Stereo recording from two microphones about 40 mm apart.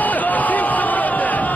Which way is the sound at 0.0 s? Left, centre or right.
Left.